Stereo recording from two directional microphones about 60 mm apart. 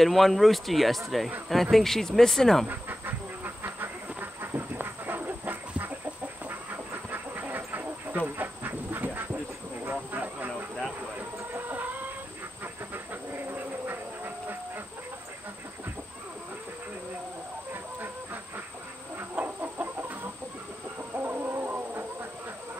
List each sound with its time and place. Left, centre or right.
0.0 s speech: centre
2.7 s train: right
7.1 s duck: right
8.4 s a sound: right
11.5 s train: right
19.3 s chicken: right
21.1 s music: right